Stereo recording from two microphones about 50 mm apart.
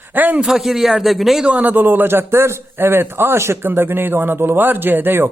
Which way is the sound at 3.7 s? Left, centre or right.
Right.